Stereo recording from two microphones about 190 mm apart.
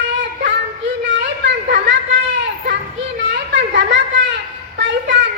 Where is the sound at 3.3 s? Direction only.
65° right (ahead or behind).